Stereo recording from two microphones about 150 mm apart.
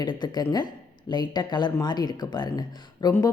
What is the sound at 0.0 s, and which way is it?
A woman's voice, 30° left (ahead or behind).